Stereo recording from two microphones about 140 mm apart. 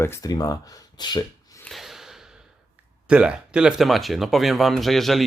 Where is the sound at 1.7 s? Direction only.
Centre (ahead or behind).